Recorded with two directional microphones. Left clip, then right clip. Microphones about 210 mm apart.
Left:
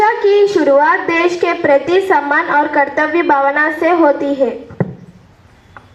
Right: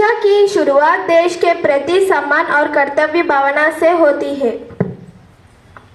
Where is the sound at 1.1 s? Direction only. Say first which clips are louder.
Right 3 dB; 50° right (ahead or behind).